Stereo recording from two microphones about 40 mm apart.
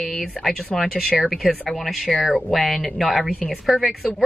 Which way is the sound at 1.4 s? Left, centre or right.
Centre.